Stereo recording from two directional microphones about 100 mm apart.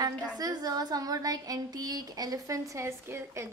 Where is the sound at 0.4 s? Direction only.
40° right (ahead or behind).